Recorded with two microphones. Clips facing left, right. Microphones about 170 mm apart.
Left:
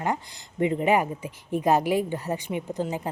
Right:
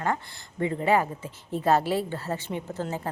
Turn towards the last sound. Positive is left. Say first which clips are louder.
# left 3 dB
turn(degrees=15)  # may be behind; listen again after turning